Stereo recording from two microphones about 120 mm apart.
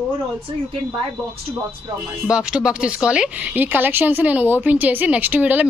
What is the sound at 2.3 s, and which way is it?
A woman's voice, 5° right (ahead or behind).